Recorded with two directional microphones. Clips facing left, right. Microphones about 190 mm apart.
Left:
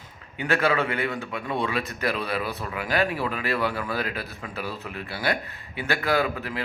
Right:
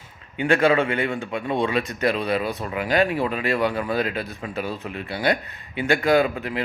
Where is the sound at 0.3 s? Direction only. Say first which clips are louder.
Right 5 dB; 25° right (ahead or behind).